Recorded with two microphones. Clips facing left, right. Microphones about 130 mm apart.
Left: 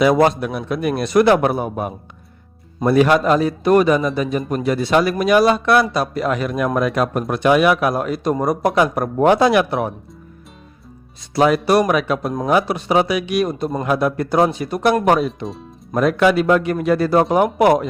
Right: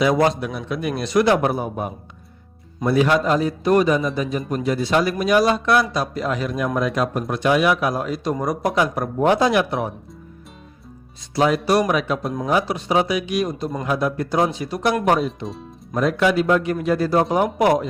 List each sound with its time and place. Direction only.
0.0 s a man's voice: 60° left (ahead or behind); by 9.9 s 80° left
11.3 s a man's voice: 65° left (ahead or behind)